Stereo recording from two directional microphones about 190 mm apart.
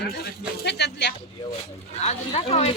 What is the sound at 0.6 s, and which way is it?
Speech, 60° left (ahead or behind).